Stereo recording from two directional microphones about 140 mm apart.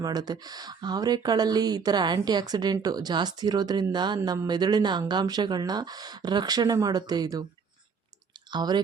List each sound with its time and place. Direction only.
0.0 s speech: 30° right (ahead or behind)
8.4 s speech: 30° right (ahead or behind)